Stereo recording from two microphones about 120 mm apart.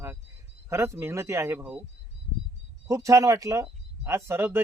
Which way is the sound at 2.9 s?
25° right (ahead or behind).